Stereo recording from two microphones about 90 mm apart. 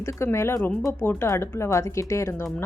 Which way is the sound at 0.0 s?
30° left (ahead or behind).